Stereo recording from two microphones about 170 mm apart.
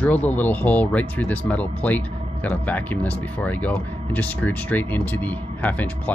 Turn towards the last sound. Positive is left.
turn(degrees=10)  # may be behind; listen again after turning